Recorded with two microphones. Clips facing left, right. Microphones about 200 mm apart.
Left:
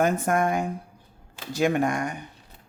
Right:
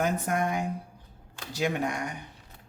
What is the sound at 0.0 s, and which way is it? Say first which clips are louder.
Speech: left 5 dB; 50° left (ahead or behind).